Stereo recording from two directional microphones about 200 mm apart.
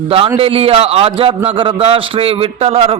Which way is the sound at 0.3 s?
30° right (ahead or behind).